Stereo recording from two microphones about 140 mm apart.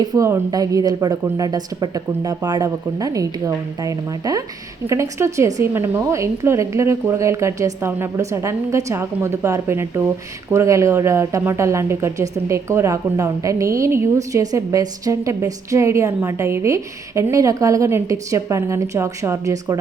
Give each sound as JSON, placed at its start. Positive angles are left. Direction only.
{"t": 0.0, "sound": "a woman's voice", "side_deg": -25}